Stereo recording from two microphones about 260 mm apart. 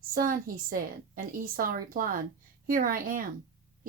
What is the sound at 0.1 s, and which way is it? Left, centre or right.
Speech, right.